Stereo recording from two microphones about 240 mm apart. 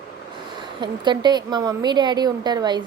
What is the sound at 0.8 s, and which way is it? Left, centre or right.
Speech, centre.